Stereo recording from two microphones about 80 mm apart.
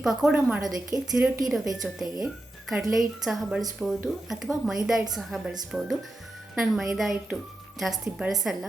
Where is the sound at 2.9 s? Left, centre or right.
Centre.